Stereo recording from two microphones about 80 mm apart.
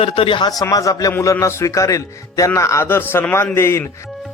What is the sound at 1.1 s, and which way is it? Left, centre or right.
Speech, left.